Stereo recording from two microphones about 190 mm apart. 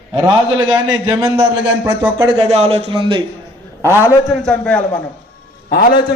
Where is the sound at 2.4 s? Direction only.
35° right (ahead or behind).